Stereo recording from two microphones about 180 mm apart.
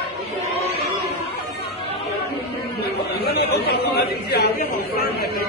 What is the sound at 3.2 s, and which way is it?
Chatter, 65° left (ahead or behind).